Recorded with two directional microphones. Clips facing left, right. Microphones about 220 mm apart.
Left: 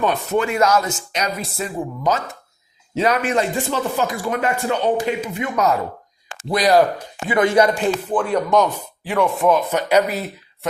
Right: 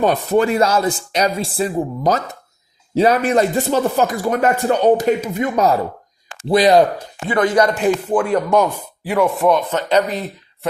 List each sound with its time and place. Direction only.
0.0 s speech: 35° right (ahead or behind)
7.3 s speech: 20° left (ahead or behind)
7.5 s speech: 10° left (ahead or behind)
8.2 s speech: 5° right (ahead or behind)